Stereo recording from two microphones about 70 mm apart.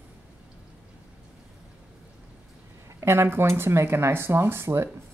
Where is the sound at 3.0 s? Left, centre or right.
Right.